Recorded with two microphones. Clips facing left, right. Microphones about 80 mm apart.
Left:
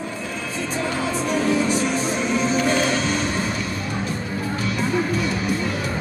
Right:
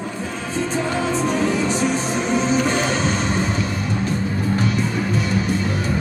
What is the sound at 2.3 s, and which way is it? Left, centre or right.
Music, right.